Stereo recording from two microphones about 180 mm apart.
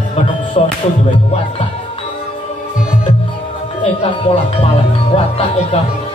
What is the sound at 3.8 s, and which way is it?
Speech, 30° left (ahead or behind).